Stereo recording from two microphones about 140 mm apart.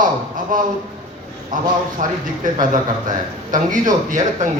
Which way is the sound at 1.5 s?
70° right (ahead or behind).